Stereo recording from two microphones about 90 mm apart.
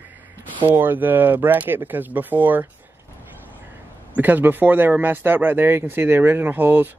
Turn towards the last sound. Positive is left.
turn(degrees=-20)  # may be behind; listen again after turning